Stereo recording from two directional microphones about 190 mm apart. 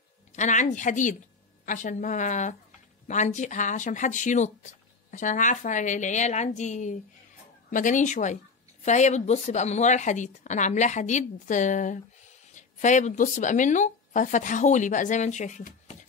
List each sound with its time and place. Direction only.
0.3 s a woman's voice: 40° left (ahead or behind)